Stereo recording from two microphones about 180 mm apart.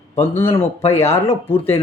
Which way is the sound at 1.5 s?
35° left (ahead or behind).